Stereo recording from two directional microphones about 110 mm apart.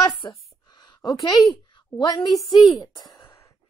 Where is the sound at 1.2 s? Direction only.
35° left (ahead or behind).